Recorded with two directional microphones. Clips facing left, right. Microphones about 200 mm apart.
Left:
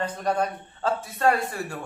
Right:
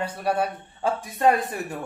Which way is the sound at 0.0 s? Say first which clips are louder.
Right 1 dB; 10° right (ahead or behind).